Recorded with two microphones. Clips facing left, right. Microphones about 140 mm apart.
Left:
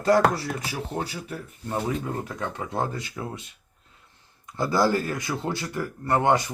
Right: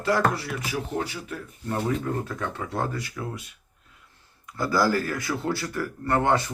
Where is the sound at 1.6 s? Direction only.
15° left (ahead or behind).